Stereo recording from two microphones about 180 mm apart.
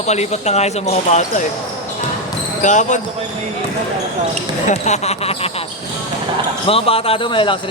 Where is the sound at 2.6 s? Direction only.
45° left (ahead or behind).